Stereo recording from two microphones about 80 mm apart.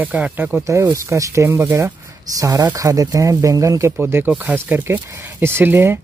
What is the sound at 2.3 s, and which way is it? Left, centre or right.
Speech, right.